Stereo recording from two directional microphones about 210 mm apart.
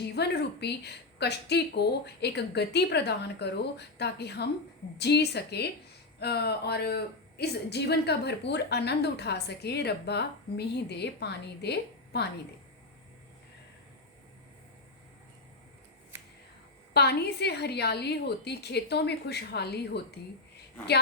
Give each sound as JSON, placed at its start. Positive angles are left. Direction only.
{"t": 0.0, "sound": "a woman's voice", "side_deg": 55}
{"t": 16.9, "sound": "a woman's voice", "side_deg": 50}